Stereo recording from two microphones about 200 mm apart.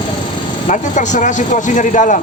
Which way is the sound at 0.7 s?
35° left (ahead or behind).